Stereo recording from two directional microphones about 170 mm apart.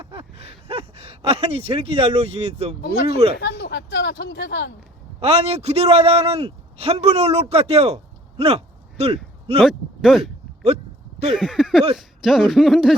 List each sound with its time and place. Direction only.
0.1 s gasp: 35° right (ahead or behind)
2.8 s speech: 70° left (ahead or behind); by 4.7 s 90° left
5.2 s a man's voice: 40° right (ahead or behind)
9.6 s speech: centre (ahead or behind)
11.3 s speech: 5° right (ahead or behind)